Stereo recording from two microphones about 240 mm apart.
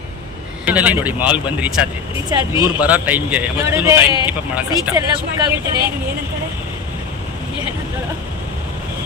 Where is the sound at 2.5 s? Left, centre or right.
Centre.